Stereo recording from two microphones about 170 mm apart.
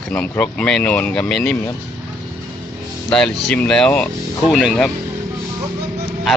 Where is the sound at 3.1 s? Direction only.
5° left (ahead or behind).